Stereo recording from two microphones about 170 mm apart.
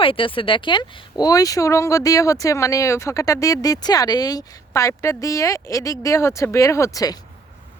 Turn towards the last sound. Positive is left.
turn(degrees=20)  # may be behind; listen again after turning